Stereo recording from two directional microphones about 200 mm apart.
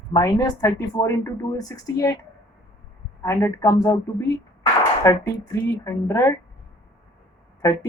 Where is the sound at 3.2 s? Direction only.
15° left (ahead or behind).